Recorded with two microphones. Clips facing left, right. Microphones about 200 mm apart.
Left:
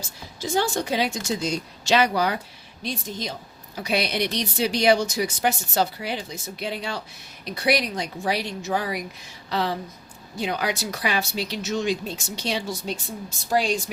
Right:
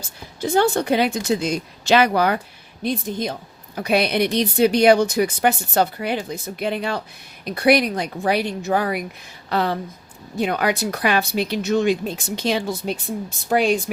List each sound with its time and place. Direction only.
0.4 s a woman's voice: 60° right (ahead or behind)